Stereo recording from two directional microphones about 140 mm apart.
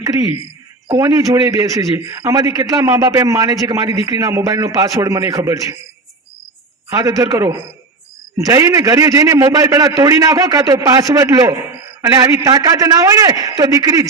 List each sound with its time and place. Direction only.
0.0 s a man's voice: 25° right (ahead or behind)
6.9 s a man's voice: 25° right (ahead or behind)